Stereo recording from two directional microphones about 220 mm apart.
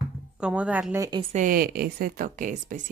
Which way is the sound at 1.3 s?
40° right (ahead or behind).